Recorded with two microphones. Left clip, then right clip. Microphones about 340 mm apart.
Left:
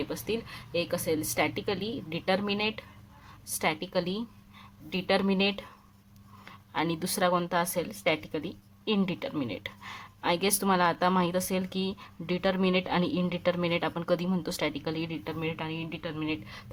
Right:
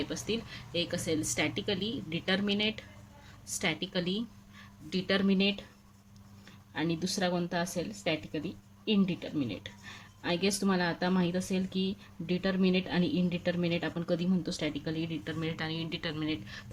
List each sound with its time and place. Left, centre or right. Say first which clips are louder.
0.1 s a woman's voice: left 2 dB; centre
7.0 s a woman's voice: left 5 dB; centre